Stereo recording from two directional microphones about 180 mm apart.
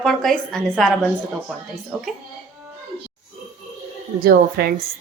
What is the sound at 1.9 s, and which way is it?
Speech, 5° right (ahead or behind).